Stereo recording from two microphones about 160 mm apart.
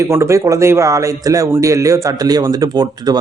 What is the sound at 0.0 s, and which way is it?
Speech, 20° right (ahead or behind).